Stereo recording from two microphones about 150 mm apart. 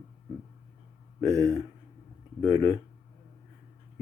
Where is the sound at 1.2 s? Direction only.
20° right (ahead or behind).